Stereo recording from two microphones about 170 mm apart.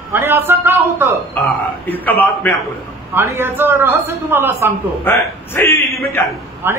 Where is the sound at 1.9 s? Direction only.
10° left (ahead or behind).